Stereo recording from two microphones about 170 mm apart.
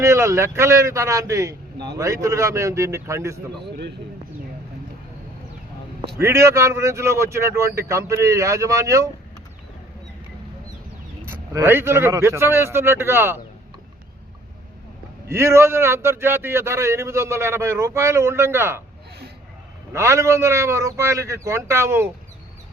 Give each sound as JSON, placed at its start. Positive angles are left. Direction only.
{"t": 0.0, "sound": "a man's voice", "side_deg": -15}
{"t": 3.7, "sound": "speech", "side_deg": -75}
{"t": 6.1, "sound": "a man's voice", "side_deg": -15}
{"t": 11.3, "sound": "a man's voice", "side_deg": -15}
{"t": 15.3, "sound": "a man's voice", "side_deg": -15}
{"t": 19.9, "sound": "a man's voice", "side_deg": -15}